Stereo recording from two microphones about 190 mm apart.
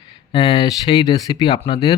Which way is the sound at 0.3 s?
30° left (ahead or behind).